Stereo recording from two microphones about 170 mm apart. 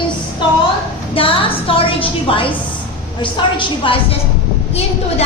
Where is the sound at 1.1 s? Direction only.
30° left (ahead or behind).